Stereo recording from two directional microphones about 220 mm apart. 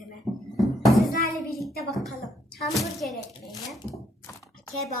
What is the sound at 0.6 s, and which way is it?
Music, centre (ahead or behind).